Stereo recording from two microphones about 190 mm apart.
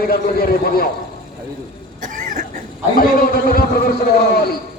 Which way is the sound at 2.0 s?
45° right (ahead or behind).